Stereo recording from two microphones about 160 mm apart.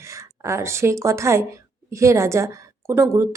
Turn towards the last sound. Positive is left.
turn(degrees=-20)  # may be behind; listen again after turning